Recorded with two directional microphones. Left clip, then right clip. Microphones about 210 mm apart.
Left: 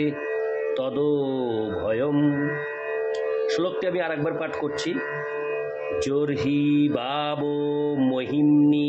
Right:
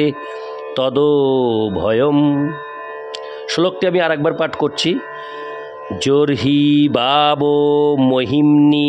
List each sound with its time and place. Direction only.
0.7 s mantra: 55° right (ahead or behind)
3.4 s mantra: 55° right (ahead or behind)
5.9 s mantra: 55° right (ahead or behind)